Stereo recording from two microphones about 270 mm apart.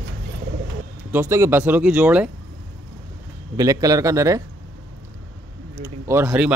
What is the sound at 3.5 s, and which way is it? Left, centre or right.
Speech, centre.